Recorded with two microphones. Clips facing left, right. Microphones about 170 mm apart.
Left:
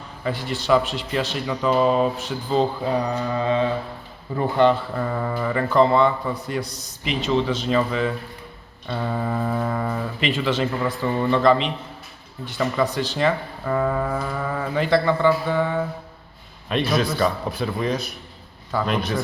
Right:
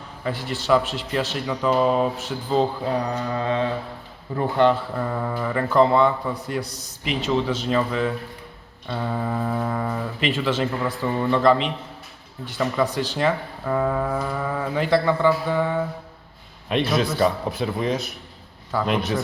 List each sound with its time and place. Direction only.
0.3 s speech: 5° right (ahead or behind)
16.6 s a man's voice: 20° right (ahead or behind)